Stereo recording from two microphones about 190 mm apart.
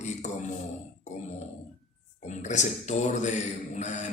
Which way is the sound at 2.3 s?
40° left (ahead or behind).